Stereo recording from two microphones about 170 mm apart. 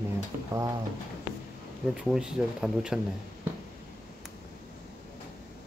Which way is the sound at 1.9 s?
5° right (ahead or behind).